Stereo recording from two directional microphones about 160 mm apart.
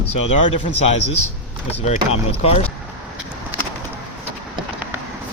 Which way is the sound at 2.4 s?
40° left (ahead or behind).